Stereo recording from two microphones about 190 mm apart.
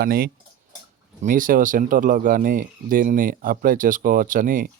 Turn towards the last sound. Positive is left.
turn(degrees=-45)  # may be behind; listen again after turning